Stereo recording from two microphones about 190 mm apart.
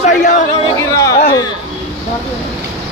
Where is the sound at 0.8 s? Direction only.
15° left (ahead or behind).